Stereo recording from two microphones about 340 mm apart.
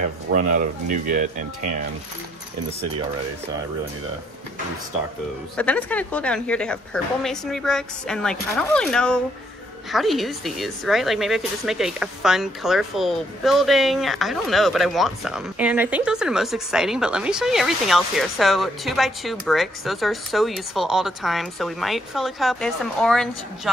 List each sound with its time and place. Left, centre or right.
0.0 s speech: right
5.6 s speech: centre